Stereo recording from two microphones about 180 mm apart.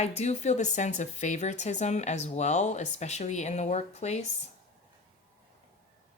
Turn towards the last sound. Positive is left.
turn(degrees=40)  # may be behind; listen again after turning